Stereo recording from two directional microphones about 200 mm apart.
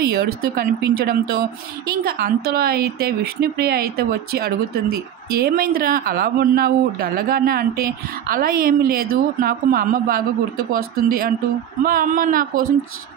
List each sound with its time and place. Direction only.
0.0 s speech: 50° right (ahead or behind)